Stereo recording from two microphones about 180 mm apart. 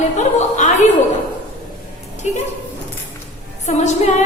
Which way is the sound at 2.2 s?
40° left (ahead or behind).